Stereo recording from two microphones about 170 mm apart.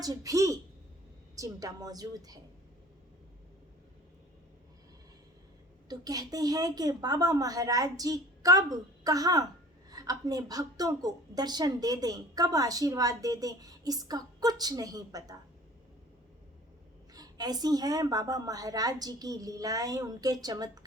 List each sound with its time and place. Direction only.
0.0 s a woman's voice: 20° right (ahead or behind)
5.9 s a woman's voice: 20° right (ahead or behind)
17.2 s a woman's voice: 25° right (ahead or behind)